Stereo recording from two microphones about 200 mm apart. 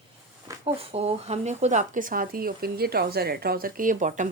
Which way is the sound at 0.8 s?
30° right (ahead or behind).